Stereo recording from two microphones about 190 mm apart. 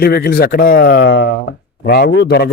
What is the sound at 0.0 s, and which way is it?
A man's voice, 55° left (ahead or behind).